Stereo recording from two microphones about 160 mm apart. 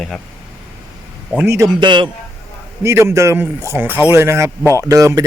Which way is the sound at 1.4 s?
15° right (ahead or behind).